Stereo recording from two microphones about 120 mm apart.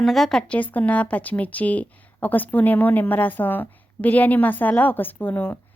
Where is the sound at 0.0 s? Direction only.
Centre (ahead or behind).